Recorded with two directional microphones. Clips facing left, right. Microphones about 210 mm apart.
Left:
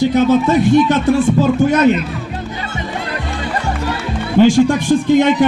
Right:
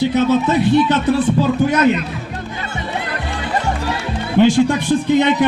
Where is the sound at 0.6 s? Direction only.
45° left (ahead or behind).